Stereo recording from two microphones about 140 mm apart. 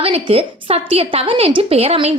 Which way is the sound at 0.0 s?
45° right (ahead or behind).